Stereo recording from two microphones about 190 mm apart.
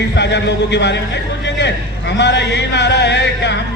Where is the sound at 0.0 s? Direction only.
65° left (ahead or behind).